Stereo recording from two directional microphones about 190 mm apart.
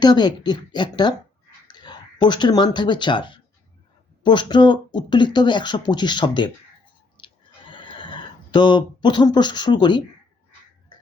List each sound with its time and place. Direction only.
0.0 s speech: 20° left (ahead or behind)
7.2 s a sound: 25° left (ahead or behind)
7.7 s speech: 25° left (ahead or behind)